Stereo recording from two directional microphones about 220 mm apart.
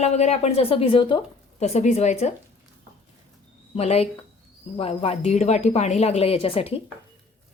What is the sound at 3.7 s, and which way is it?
Speech, 30° left (ahead or behind).